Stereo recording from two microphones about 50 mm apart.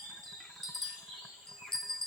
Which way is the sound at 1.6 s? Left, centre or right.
Centre.